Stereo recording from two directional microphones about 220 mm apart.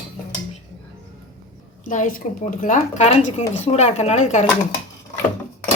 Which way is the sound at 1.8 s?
35° left (ahead or behind).